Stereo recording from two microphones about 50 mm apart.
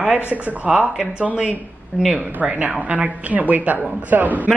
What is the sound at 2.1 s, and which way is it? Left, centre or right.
Speech, right.